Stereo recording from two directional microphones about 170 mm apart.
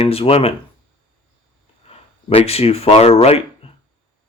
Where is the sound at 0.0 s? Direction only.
35° left (ahead or behind).